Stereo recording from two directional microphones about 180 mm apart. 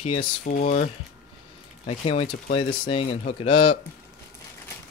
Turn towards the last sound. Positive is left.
turn(degrees=30)  # may be behind; listen again after turning